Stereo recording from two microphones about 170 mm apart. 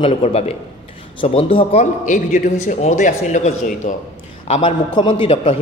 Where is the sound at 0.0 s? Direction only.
35° left (ahead or behind).